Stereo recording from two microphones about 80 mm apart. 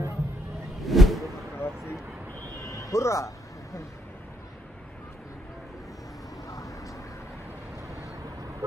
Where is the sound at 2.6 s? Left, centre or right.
Left.